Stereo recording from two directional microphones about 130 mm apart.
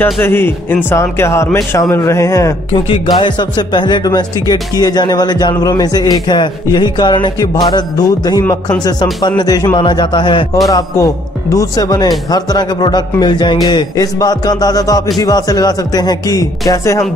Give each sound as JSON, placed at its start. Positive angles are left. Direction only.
{"t": 0.0, "sound": "speech", "side_deg": 15}
{"t": 2.7, "sound": "speech", "side_deg": 40}